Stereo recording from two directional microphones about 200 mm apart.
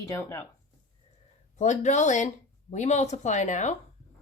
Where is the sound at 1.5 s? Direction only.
35° left (ahead or behind).